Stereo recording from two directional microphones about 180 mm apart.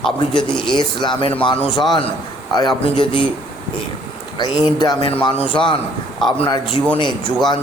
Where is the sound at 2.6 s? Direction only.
25° left (ahead or behind).